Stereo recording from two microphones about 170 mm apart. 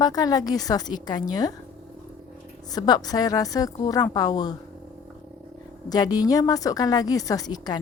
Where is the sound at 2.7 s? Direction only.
25° left (ahead or behind).